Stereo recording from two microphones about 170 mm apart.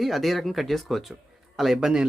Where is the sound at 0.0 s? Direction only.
Centre (ahead or behind).